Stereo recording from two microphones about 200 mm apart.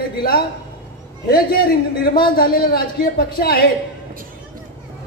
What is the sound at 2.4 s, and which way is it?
Speech, 50° left (ahead or behind).